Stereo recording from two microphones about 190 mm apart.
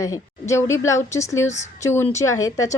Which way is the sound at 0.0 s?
15° left (ahead or behind).